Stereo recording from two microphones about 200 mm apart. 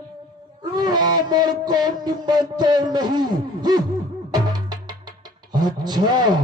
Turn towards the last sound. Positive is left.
turn(degrees=-20)  # may be behind; listen again after turning